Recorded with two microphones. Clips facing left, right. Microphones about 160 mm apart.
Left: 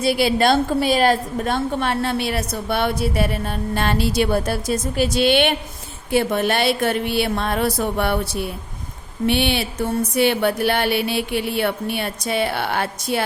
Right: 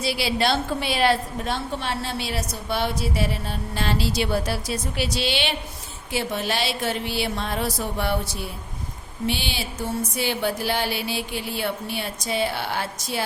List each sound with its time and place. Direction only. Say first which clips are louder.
0.0 s a woman's voice: left 6 dB; 50° left (ahead or behind)